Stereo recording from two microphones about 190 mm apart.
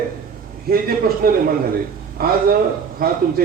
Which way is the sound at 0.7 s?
55° right (ahead or behind).